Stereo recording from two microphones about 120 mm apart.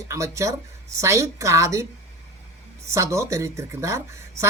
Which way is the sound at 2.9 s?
25° right (ahead or behind).